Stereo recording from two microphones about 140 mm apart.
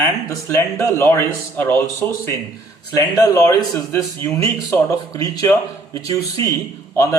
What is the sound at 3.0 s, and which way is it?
A man's voice, 25° left (ahead or behind).